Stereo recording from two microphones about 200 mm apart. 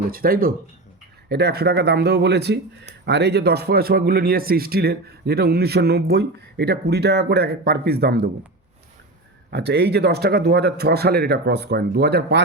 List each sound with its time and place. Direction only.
0.1 s speech: 45° right (ahead or behind)
9.5 s speech: 55° right (ahead or behind)